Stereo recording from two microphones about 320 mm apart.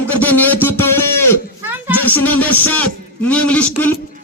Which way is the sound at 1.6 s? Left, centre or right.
Centre.